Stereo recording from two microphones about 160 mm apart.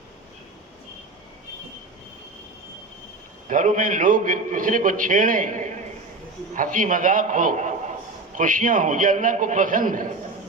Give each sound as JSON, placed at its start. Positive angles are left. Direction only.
{"t": 3.5, "sound": "a man's voice", "side_deg": -55}